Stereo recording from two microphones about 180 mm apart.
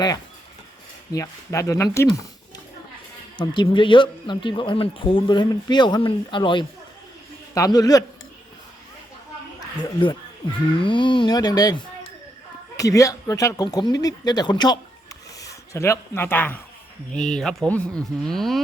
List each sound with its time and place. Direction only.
1.1 s speech: 15° left (ahead or behind)
3.3 s speech: 25° left (ahead or behind)
9.7 s speech: 25° left (ahead or behind); by 18.6 s centre (ahead or behind)